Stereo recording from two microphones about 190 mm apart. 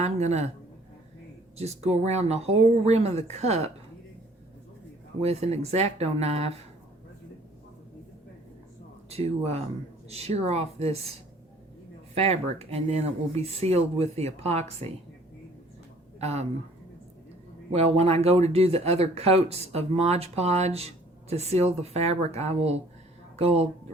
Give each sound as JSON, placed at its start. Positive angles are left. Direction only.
{"t": 0.0, "sound": "speech", "side_deg": -35}
{"t": 1.5, "sound": "speech", "side_deg": -35}
{"t": 5.2, "sound": "speech", "side_deg": -35}
{"t": 9.0, "sound": "speech", "side_deg": -35}
{"t": 12.1, "sound": "speech", "side_deg": -35}
{"t": 16.2, "sound": "speech", "side_deg": -35}
{"t": 17.7, "sound": "speech", "side_deg": -30}